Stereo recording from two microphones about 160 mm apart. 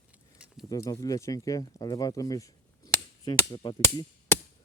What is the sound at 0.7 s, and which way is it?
Speech, 20° left (ahead or behind).